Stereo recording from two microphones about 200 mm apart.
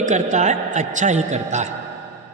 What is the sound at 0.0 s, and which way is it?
A man's voice, 35° right (ahead or behind).